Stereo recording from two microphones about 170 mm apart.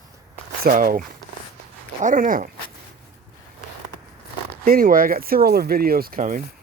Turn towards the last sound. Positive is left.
turn(degrees=-55)  # may be behind; listen again after turning